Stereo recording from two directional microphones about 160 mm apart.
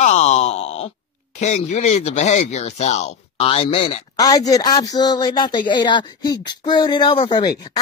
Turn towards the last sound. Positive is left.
turn(degrees=25)  # may be behind; listen again after turning